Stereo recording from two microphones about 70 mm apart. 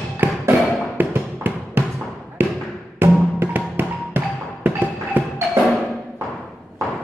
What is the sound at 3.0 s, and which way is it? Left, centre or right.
Music, right.